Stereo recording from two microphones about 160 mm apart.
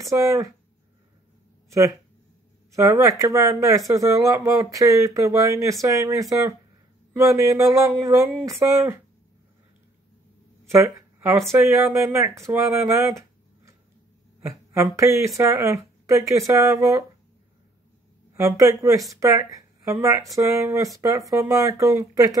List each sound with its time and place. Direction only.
0.0 s speech: 20° right (ahead or behind)
1.7 s speech: 20° right (ahead or behind)
10.7 s speech: 15° right (ahead or behind)
14.4 s speech: 15° right (ahead or behind)
18.3 s speech: 20° right (ahead or behind)